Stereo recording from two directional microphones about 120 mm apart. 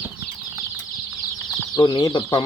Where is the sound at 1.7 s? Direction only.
35° left (ahead or behind).